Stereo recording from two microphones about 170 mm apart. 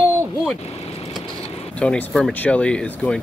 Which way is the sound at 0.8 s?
35° left (ahead or behind).